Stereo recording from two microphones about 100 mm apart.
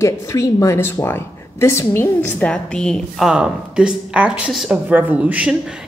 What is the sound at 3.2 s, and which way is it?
Speech, 10° right (ahead or behind).